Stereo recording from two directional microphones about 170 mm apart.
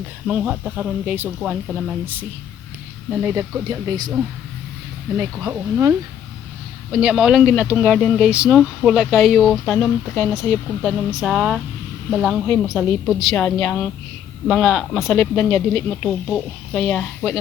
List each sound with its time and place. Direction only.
0.3 s speech: 5° right (ahead or behind)
3.1 s speech: 10° right (ahead or behind)
5.1 s speech: 20° right (ahead or behind)
6.9 s a woman's voice: 5° right (ahead or behind)
10.8 s a woman's voice: centre (ahead or behind)
15.2 s speech: 10° left (ahead or behind)